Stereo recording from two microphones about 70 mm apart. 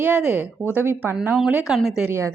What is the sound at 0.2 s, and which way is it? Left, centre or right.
A woman's voice, centre.